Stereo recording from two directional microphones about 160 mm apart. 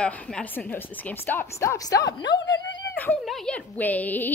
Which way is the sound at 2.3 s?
90° left.